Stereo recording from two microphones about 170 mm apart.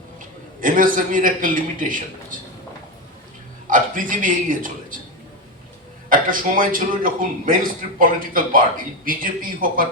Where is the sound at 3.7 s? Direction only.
50° right (ahead or behind).